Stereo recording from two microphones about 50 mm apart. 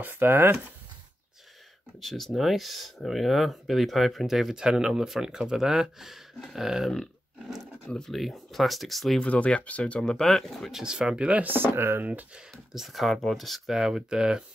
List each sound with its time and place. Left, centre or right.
0.0 s speech: right
2.0 s speech: centre
8.1 s speech: centre
9.2 s speech: left
9.9 s speech: centre
10.7 s speech: centre
11.4 s speech: right
11.7 s speech: right
12.0 s speech: right
12.7 s speech: centre